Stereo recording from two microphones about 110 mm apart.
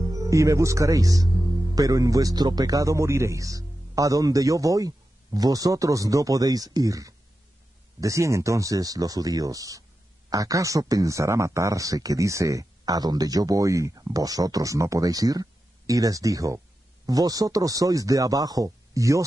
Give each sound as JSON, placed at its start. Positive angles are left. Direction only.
{"t": 0.0, "sound": "speech", "side_deg": -30}